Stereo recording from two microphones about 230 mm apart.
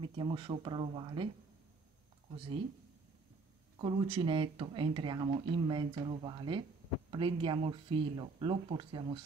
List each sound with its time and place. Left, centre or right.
0.0 s speech: right
3.8 s speech: right